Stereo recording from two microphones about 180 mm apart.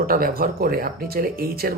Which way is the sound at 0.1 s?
55° right (ahead or behind).